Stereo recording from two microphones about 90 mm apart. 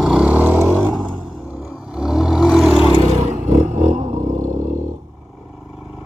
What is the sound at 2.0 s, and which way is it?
Vehicle, 5° right (ahead or behind).